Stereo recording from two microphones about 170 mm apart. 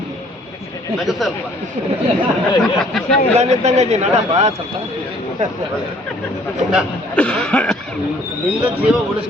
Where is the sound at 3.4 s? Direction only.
40° right (ahead or behind).